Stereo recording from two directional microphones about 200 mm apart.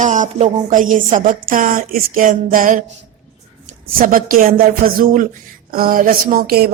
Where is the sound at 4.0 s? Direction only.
45° right (ahead or behind).